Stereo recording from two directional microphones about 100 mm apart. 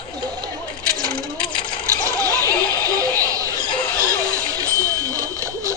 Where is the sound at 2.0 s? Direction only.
35° right (ahead or behind).